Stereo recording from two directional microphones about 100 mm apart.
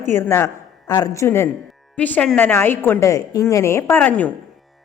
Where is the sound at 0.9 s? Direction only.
40° left (ahead or behind).